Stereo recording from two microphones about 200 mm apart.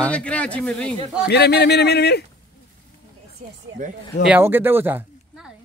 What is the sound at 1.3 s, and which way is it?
Speech, 55° left (ahead or behind).